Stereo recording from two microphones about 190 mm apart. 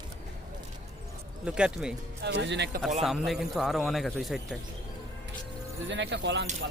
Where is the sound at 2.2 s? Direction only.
70° right (ahead or behind).